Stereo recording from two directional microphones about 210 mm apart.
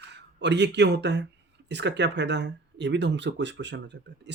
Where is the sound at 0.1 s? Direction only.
55° right (ahead or behind).